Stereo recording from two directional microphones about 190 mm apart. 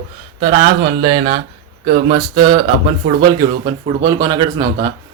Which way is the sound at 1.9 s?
30° right (ahead or behind).